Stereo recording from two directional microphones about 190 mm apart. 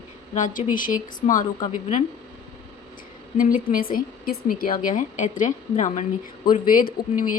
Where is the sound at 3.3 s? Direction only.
45° left (ahead or behind).